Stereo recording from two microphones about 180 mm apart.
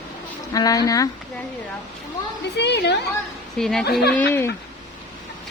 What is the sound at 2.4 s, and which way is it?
Speech, 70° left (ahead or behind).